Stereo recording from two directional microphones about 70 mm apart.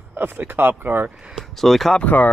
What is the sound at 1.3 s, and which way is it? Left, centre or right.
Speech, centre.